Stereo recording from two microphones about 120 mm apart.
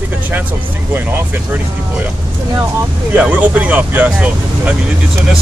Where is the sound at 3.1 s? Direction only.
10° right (ahead or behind).